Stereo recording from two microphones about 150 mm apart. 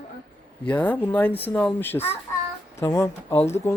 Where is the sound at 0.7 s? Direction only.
10° left (ahead or behind).